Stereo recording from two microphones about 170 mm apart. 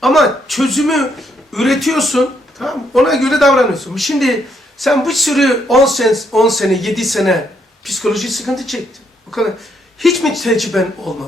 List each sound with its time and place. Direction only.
0.0 s speech: centre (ahead or behind)